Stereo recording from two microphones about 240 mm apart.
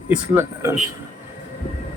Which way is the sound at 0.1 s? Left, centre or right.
Centre.